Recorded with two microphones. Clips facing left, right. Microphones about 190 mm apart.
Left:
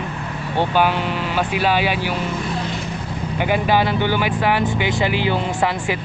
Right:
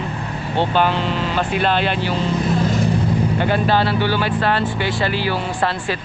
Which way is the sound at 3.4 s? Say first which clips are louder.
Left 3 dB; 15° left (ahead or behind).